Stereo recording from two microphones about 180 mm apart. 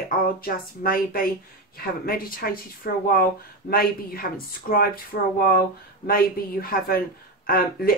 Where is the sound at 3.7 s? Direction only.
55° left (ahead or behind).